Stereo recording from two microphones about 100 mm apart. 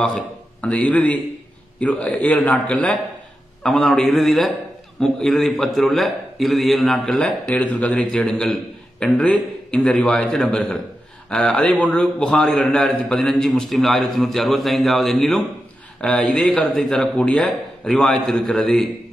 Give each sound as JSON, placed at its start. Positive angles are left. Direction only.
{"t": 0.0, "sound": "a man's voice", "side_deg": 10}